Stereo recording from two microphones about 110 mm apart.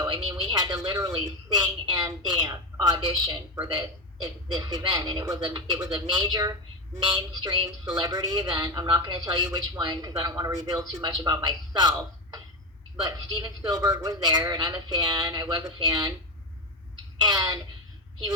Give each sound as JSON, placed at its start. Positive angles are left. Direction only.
{"t": 0.0, "sound": "speech", "side_deg": -45}
{"t": 17.2, "sound": "speech", "side_deg": -40}